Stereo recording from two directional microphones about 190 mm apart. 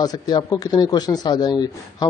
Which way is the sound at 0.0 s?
20° left (ahead or behind).